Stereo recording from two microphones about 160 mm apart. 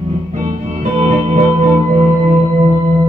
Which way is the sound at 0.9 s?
45° right (ahead or behind).